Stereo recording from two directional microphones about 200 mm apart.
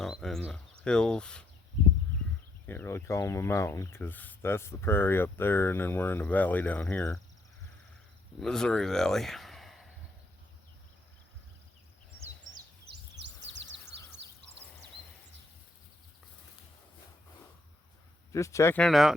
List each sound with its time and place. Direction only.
0.0 s speech: centre (ahead or behind)
2.6 s speech: 10° left (ahead or behind)
8.4 s speech: 5° left (ahead or behind)
12.9 s a sound: 60° right (ahead or behind)
18.3 s speech: 15° left (ahead or behind); by 19.1 s centre (ahead or behind)